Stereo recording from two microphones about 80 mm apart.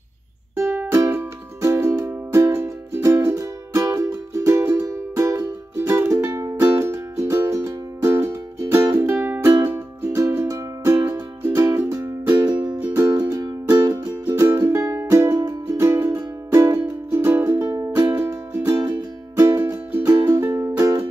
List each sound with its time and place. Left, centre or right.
0.6 s music: right
13.4 s music: right
17.5 s music: right
18.0 s music: right
18.8 s music: right
19.9 s music: right